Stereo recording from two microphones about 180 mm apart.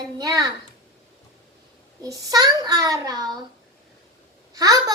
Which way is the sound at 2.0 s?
20° right (ahead or behind).